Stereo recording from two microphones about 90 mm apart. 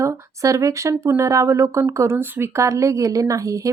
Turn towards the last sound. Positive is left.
turn(degrees=-35)  # may be behind; listen again after turning